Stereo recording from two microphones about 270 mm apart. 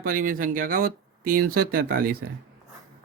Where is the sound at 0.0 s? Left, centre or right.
Right.